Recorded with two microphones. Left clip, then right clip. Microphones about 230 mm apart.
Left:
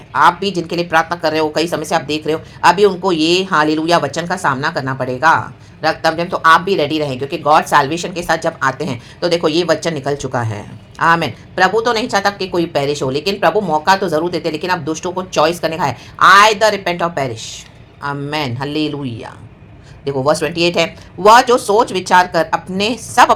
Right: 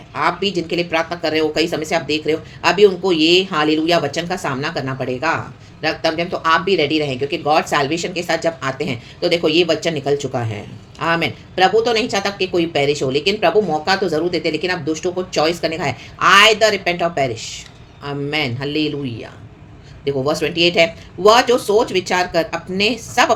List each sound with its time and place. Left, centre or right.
0.1 s a woman's voice: centre